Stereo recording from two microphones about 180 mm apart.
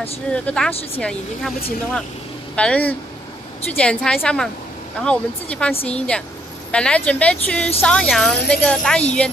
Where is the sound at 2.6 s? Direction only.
10° left (ahead or behind).